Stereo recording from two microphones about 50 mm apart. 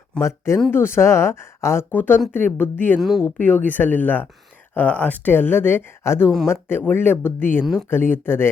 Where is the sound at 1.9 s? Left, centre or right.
Left.